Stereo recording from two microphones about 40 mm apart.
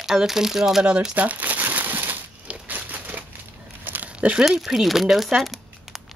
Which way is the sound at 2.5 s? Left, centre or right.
Right.